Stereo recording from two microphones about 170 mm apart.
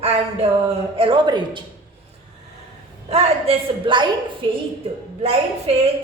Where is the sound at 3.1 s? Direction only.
30° right (ahead or behind).